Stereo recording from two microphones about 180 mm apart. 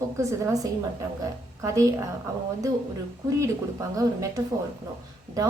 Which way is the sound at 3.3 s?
15° right (ahead or behind).